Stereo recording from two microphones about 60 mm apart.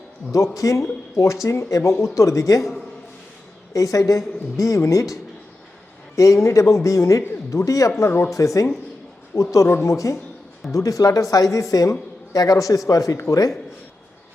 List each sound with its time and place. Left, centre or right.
0.3 s speech: left
3.7 s a woman's voice: left